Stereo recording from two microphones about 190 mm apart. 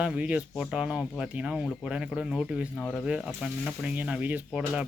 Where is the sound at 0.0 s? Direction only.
5° right (ahead or behind).